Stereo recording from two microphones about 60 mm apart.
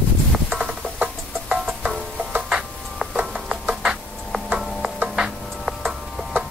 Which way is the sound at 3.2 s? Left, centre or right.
Centre.